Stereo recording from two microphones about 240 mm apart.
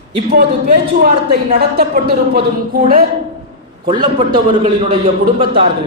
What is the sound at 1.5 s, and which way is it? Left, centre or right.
Speech, right.